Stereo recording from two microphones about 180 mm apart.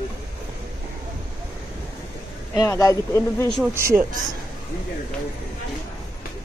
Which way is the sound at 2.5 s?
20° left (ahead or behind).